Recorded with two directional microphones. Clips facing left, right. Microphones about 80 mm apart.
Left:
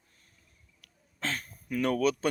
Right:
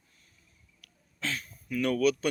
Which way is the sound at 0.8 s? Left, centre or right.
Left.